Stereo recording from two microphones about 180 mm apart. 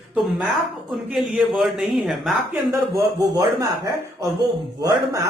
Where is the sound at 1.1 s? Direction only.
Centre (ahead or behind).